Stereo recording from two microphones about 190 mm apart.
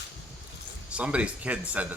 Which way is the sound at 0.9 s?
5° right (ahead or behind).